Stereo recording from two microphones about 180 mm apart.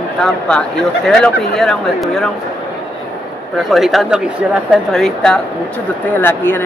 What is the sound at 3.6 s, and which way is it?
Speech, centre (ahead or behind).